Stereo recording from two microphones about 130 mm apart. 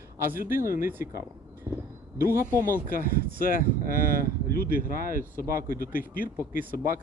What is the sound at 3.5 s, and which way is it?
Speech, 90° left.